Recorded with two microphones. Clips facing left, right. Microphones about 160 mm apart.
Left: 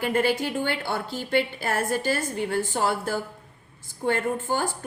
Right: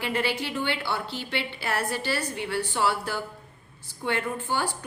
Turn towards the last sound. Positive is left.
turn(degrees=45)  # may be behind; listen again after turning